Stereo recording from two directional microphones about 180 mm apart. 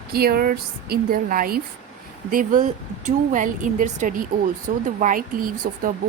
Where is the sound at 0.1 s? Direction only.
60° right (ahead or behind).